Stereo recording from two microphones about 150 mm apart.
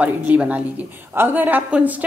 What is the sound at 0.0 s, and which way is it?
Speech, 10° right (ahead or behind).